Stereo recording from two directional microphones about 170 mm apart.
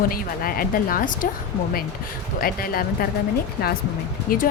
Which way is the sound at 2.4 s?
60° left (ahead or behind).